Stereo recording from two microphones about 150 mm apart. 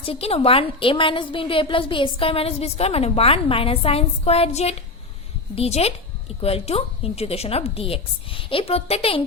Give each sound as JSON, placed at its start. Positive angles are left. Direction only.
{"t": 0.0, "sound": "a woman's voice", "side_deg": 40}